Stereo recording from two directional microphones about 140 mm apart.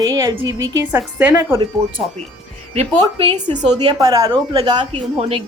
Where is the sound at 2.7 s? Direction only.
50° right (ahead or behind).